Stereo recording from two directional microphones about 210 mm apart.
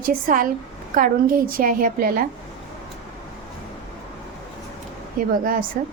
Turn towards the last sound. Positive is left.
turn(degrees=-40)  # may be behind; listen again after turning